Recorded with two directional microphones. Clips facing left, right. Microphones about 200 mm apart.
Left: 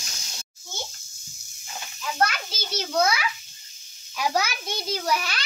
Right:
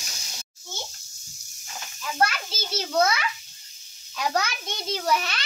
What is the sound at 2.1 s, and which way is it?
A child's voice, 5° right (ahead or behind).